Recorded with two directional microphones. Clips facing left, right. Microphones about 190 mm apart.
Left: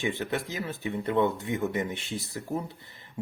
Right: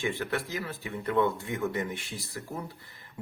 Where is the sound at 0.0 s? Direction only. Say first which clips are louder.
Left 1 dB; 20° left (ahead or behind).